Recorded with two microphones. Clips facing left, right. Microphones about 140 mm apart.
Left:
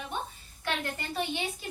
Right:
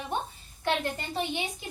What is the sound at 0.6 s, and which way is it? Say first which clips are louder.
Speech: right 4 dB; 20° right (ahead or behind).